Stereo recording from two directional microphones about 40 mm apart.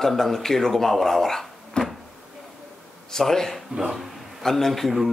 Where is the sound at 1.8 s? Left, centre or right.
Left.